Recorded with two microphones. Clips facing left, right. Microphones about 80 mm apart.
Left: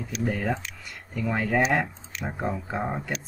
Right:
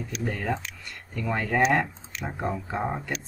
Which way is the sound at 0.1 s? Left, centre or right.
Centre.